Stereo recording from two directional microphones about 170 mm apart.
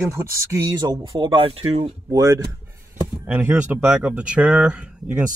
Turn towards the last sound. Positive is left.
turn(degrees=-5)  # may be behind; listen again after turning